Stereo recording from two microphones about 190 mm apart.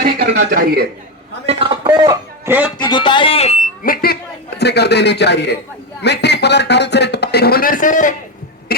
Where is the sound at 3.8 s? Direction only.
55° left (ahead or behind).